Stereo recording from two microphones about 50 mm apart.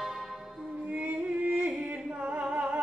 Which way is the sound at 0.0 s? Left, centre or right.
Centre.